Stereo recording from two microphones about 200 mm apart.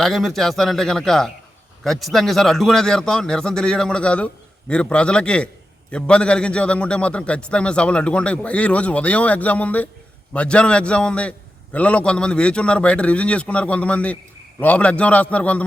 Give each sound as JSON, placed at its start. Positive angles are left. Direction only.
{"t": 0.0, "sound": "a man's voice", "side_deg": 0}